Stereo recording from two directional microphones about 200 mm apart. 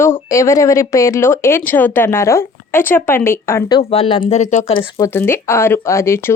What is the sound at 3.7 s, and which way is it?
A woman's voice, 25° left (ahead or behind).